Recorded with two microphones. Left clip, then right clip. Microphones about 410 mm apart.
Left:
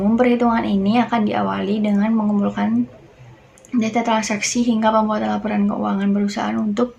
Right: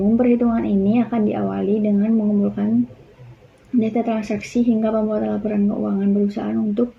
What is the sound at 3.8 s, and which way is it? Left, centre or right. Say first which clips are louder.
A woman's voice: left 2 dB; centre.